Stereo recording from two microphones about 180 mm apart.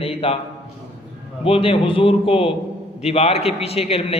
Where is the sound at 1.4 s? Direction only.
30° left (ahead or behind).